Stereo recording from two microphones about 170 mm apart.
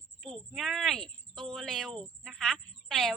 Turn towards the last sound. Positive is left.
turn(degrees=0)  # may be behind; listen again after turning